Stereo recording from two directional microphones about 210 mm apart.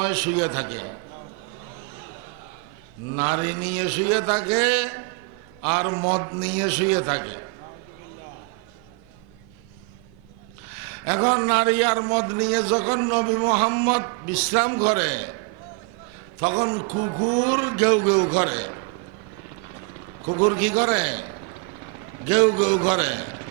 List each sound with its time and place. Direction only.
0.0 s a man's voice: 15° right (ahead or behind)
3.2 s a man's voice: 15° right (ahead or behind)
6.4 s a man's voice: 10° right (ahead or behind)
11.0 s a man's voice: 15° right (ahead or behind)
16.4 s a man's voice: 20° right (ahead or behind)
17.5 s a man's voice: 15° right (ahead or behind)
20.2 s a man's voice: 25° right (ahead or behind)
22.3 s a man's voice: 15° right (ahead or behind)